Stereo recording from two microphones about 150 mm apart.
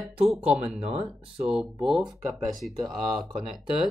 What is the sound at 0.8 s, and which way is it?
Speech, 45° right (ahead or behind).